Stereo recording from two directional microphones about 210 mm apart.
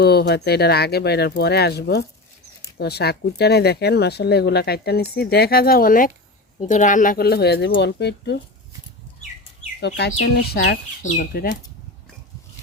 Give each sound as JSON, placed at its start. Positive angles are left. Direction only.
{"t": 0.0, "sound": "speech", "side_deg": 50}
{"t": 9.8, "sound": "speech", "side_deg": 60}